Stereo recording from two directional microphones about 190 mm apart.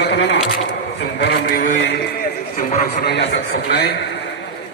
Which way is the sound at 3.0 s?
60° left (ahead or behind).